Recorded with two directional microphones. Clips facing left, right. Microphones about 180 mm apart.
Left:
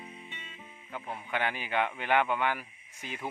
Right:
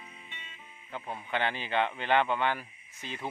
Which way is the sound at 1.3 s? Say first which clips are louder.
Right 1 dB; 10° left (ahead or behind).